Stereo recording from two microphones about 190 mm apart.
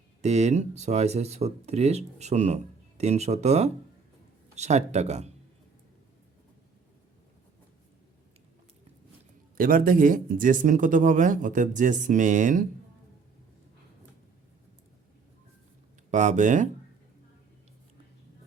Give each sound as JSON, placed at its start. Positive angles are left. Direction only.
{"t": 0.2, "sound": "speech", "side_deg": -35}
{"t": 9.6, "sound": "speech", "side_deg": -45}
{"t": 16.1, "sound": "speech", "side_deg": -40}